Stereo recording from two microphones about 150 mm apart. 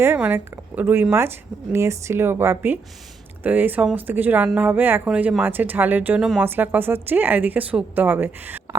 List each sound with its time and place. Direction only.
0.0 s speech: 15° right (ahead or behind)